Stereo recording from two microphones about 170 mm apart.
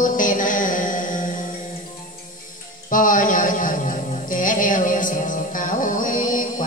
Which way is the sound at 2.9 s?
50° left (ahead or behind).